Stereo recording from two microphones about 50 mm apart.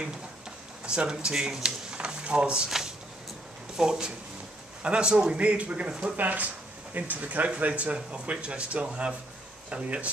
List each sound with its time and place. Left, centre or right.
0.8 s speech: centre
3.7 s speech: centre